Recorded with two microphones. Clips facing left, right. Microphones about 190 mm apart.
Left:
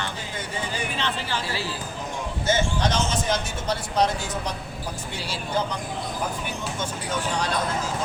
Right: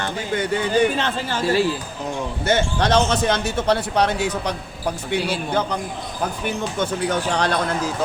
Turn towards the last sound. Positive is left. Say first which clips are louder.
# right 6 dB
turn(degrees=-65)  # may be behind; listen again after turning